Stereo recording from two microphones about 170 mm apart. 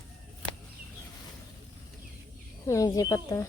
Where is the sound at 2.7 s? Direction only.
20° left (ahead or behind).